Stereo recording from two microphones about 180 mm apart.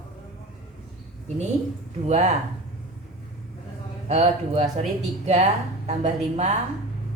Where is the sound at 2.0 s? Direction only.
40° right (ahead or behind).